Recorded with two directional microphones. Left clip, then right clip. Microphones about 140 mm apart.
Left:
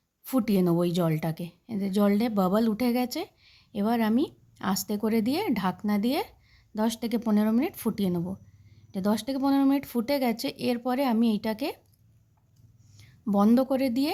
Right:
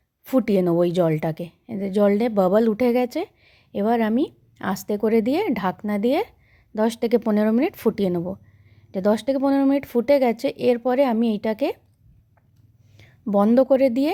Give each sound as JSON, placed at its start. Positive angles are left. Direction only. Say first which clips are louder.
{"t": 0.3, "sound": "a woman's voice", "louder": "right 6 dB", "side_deg": -25}
{"t": 13.0, "sound": "a woman's voice", "louder": "right 6 dB", "side_deg": -25}